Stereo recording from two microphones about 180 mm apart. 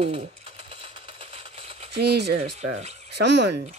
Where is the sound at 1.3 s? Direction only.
35° right (ahead or behind).